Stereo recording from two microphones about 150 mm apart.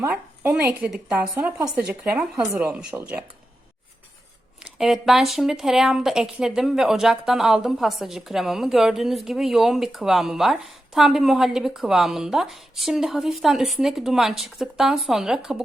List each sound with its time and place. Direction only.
0.0 s a woman's voice: 10° right (ahead or behind)
4.6 s speech: 5° right (ahead or behind)